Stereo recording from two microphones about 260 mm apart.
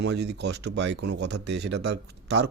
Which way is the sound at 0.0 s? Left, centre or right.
Right.